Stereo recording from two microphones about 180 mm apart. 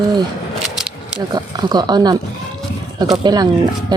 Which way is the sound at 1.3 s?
20° right (ahead or behind).